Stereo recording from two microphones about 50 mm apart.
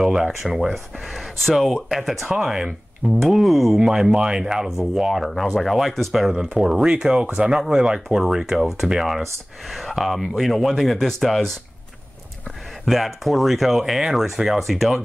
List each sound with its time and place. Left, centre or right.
0.0 s speech: centre
3.2 s speech: centre
5.3 s speech: centre
6.3 s speech: centre
12.8 s speech: centre